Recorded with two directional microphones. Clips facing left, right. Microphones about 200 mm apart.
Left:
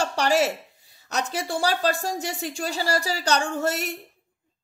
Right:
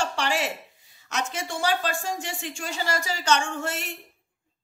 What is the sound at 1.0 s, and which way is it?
A woman's voice, 35° left (ahead or behind).